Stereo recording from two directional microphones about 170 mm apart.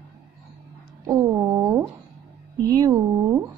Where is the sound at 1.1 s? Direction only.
15° right (ahead or behind).